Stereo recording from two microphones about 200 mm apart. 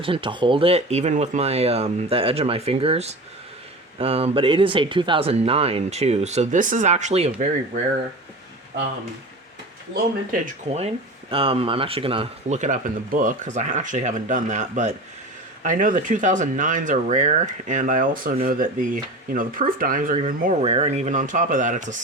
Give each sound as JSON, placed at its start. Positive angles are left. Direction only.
{"t": 0.0, "sound": "speech", "side_deg": -25}
{"t": 10.4, "sound": "speech", "side_deg": -30}